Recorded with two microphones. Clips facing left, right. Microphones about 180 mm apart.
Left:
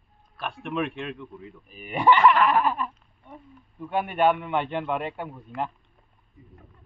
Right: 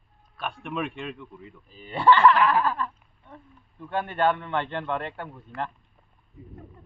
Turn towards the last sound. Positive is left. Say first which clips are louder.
# left 2 dB
turn(degrees=10)  # may be behind; listen again after turning